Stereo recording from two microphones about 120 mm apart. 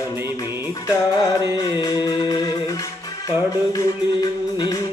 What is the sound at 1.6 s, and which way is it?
Music, 30° left (ahead or behind).